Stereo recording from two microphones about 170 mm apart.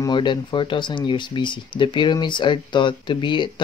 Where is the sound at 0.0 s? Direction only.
25° left (ahead or behind).